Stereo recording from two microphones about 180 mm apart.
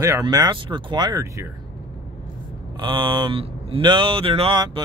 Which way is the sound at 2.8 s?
25° right (ahead or behind).